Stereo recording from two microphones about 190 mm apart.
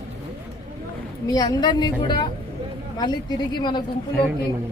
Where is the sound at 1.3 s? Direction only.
20° left (ahead or behind).